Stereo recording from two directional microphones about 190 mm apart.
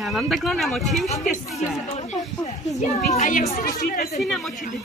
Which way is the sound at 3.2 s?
40° left (ahead or behind).